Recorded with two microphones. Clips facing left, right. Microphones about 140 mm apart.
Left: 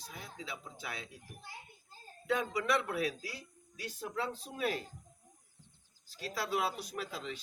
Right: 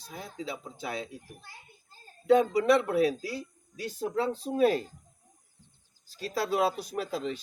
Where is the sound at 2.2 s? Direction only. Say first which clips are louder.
Right 11 dB; 30° right (ahead or behind).